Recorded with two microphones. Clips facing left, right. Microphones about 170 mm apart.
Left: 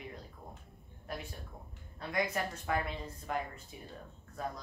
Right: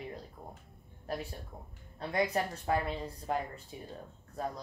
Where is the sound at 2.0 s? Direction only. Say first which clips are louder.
Right 3 dB; 30° right (ahead or behind).